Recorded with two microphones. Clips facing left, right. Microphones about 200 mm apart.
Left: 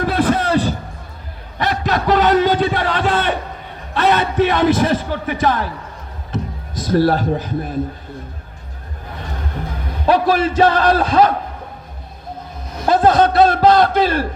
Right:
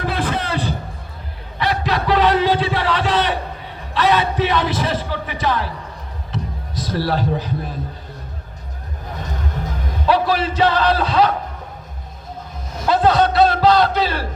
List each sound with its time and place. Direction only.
0.0 s a sound: 45° left (ahead or behind)
3.9 s a man's voice: 50° left (ahead or behind)
6.3 s music: 50° left (ahead or behind)
10.1 s a man's voice: 50° left (ahead or behind)
12.8 s a man's voice: 50° left (ahead or behind)